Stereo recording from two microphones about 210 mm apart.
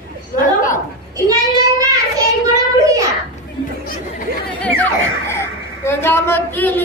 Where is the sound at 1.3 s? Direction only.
15° right (ahead or behind).